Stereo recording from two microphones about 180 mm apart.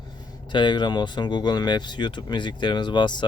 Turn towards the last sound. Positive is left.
turn(degrees=25)  # may be behind; listen again after turning